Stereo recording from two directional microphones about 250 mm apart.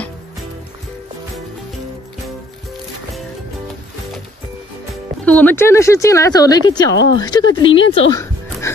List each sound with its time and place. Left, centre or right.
5.2 s speech: centre
8.1 s music: centre